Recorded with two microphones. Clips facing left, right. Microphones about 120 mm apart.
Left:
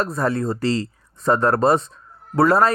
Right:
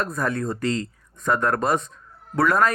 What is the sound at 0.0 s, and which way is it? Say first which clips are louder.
Speech: left 4 dB; 30° left (ahead or behind).